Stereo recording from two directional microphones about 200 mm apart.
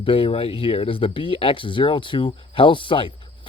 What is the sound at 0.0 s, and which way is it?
Speech, 25° left (ahead or behind).